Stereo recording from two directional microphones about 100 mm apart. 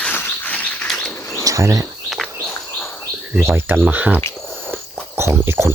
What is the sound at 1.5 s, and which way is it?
Cricket, 35° right (ahead or behind).